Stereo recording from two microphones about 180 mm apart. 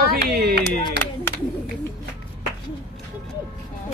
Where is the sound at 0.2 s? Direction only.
60° right (ahead or behind).